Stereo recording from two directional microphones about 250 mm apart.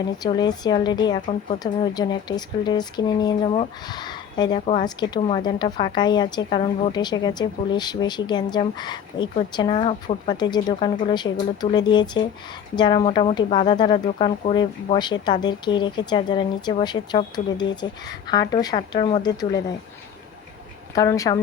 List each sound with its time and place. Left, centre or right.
0.2 s a woman's voice: centre
20.9 s a woman's voice: centre